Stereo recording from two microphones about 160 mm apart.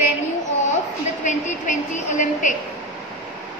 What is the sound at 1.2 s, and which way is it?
A woman's voice, 50° left (ahead or behind).